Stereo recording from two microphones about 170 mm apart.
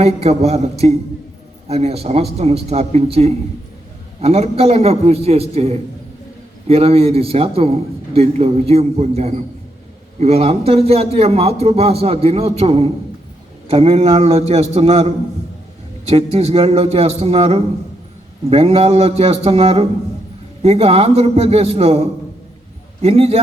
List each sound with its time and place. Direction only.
0.0 s a man's voice: 40° right (ahead or behind)